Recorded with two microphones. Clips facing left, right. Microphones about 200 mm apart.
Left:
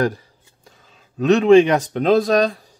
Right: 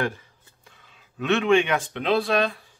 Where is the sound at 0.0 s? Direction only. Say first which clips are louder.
Left 7 dB; 35° left (ahead or behind).